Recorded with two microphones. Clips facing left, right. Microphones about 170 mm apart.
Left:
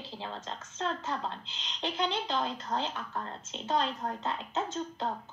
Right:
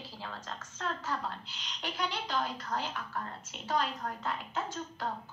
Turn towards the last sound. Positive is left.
turn(degrees=25)  # may be behind; listen again after turning